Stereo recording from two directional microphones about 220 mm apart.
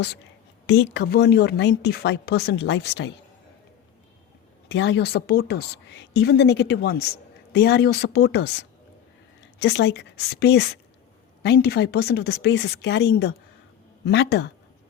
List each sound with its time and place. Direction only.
0.7 s a woman's voice: 50° left (ahead or behind)
4.7 s a woman's voice: 55° left (ahead or behind)
9.6 s a woman's voice: 50° left (ahead or behind)